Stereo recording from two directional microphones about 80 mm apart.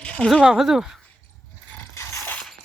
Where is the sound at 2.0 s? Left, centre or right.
Left.